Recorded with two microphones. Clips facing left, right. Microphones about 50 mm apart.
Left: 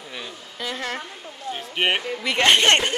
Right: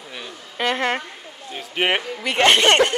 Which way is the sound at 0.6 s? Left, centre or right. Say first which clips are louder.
Right 8 dB; right.